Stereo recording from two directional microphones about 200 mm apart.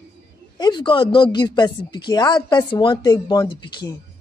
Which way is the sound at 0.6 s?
20° left (ahead or behind).